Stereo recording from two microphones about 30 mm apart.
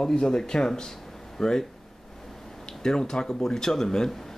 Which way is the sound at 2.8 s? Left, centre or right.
Left.